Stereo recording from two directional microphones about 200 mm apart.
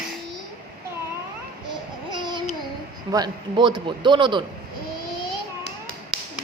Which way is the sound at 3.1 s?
20° right (ahead or behind).